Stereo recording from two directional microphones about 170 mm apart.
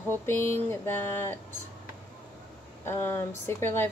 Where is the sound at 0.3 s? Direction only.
15° left (ahead or behind).